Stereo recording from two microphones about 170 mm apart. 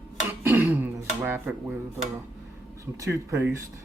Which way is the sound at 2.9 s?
15° right (ahead or behind).